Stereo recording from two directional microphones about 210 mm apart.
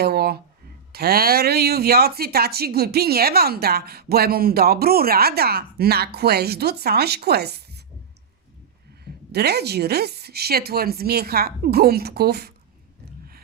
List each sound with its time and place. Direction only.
0.0 s a sound: 50° right (ahead or behind)
0.9 s speech: 45° right (ahead or behind)
9.0 s speech: 50° right (ahead or behind)